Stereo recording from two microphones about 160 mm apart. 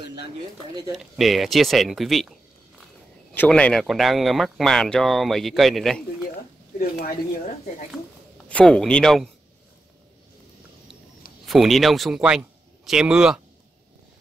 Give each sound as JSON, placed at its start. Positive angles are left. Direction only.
{"t": 0.9, "sound": "speech", "side_deg": 0}
{"t": 3.3, "sound": "speech", "side_deg": 5}
{"t": 6.8, "sound": "speech", "side_deg": 70}
{"t": 8.5, "sound": "speech", "side_deg": 5}
{"t": 11.4, "sound": "speech", "side_deg": 0}